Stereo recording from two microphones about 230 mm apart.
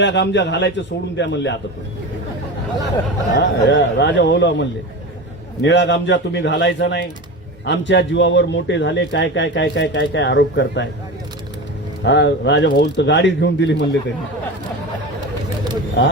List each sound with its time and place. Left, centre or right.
0.0 s speech: left
3.3 s speech: left
5.6 s speech: left
12.0 s speech: left